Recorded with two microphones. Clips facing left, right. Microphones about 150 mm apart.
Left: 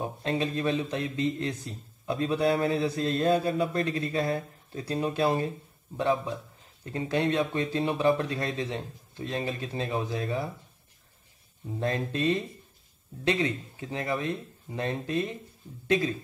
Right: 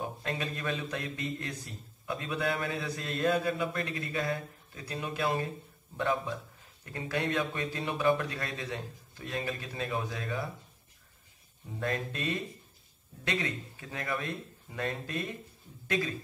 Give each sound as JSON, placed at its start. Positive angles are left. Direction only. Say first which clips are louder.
{"t": 0.0, "sound": "a man's voice", "louder": "left 6 dB", "side_deg": 30}
{"t": 5.9, "sound": "speech", "louder": "left 4 dB", "side_deg": 20}
{"t": 11.8, "sound": "speech", "louder": "left 6 dB", "side_deg": 30}